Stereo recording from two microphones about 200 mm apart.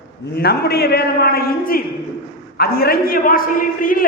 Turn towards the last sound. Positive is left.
turn(degrees=45)  # may be behind; listen again after turning